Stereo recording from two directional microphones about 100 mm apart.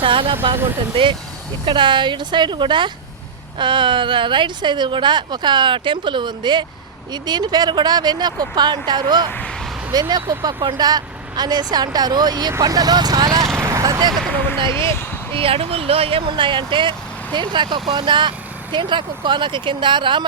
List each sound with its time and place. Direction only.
0.0 s speech: 60° right (ahead or behind)
1.6 s speech: 55° right (ahead or behind)
13.6 s vehicle: 35° right (ahead or behind)
14.1 s speech: centre (ahead or behind)
14.3 s speech: 20° left (ahead or behind)
15.3 s speech: 65° right (ahead or behind)